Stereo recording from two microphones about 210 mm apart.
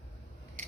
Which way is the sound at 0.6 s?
35° right (ahead or behind).